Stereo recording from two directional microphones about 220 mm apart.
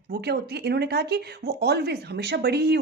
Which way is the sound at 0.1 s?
45° right (ahead or behind).